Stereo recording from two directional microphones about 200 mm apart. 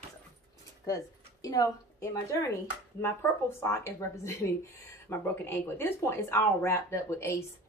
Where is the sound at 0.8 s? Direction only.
15° left (ahead or behind).